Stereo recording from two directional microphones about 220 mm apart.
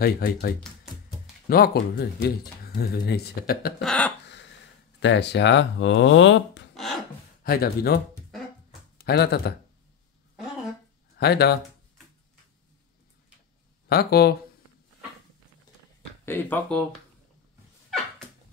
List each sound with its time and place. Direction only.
0.0 s speech: 40° left (ahead or behind)
3.8 s speech: 5° left (ahead or behind)
5.0 s speech: 50° left (ahead or behind)
6.7 s a sound: centre (ahead or behind)
7.4 s speech: 45° left (ahead or behind)
11.1 s speech: 45° left (ahead or behind)
13.8 s speech: 45° left (ahead or behind)
16.3 s speech: 10° left (ahead or behind)